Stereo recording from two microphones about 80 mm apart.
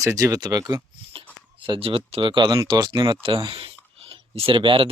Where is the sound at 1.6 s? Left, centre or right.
Right.